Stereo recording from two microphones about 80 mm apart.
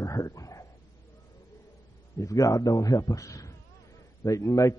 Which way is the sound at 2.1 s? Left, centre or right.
Left.